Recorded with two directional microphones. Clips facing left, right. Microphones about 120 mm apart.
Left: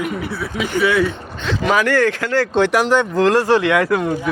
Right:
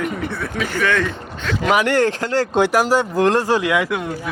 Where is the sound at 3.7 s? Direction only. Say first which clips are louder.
Left 4 dB; centre (ahead or behind).